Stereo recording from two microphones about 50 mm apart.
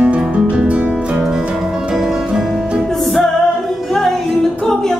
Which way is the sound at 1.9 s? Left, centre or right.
Centre.